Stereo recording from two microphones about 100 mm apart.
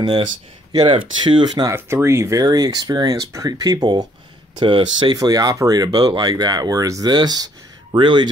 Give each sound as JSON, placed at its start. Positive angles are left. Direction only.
{"t": 0.7, "sound": "speech", "side_deg": -55}
{"t": 1.7, "sound": "speech", "side_deg": -25}
{"t": 2.4, "sound": "speech", "side_deg": -40}
{"t": 4.6, "sound": "speech", "side_deg": -55}
{"t": 5.1, "sound": "speech", "side_deg": -40}
{"t": 8.0, "sound": "speech", "side_deg": -55}